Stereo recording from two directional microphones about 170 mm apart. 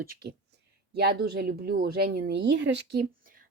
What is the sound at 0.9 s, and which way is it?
Speech, 65° right (ahead or behind).